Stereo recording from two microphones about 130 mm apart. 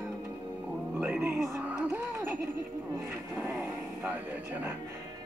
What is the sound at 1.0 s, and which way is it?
Speech, 15° right (ahead or behind).